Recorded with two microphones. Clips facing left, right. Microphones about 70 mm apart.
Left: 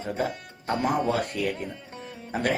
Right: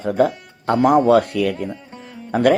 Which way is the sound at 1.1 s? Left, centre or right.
Right.